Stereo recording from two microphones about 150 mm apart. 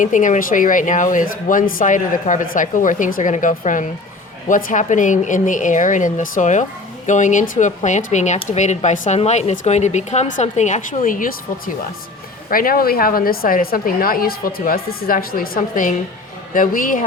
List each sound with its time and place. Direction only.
0.0 s a woman's voice: 60° left (ahead or behind)